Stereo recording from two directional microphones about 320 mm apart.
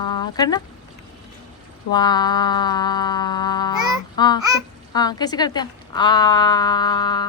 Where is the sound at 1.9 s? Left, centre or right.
Centre.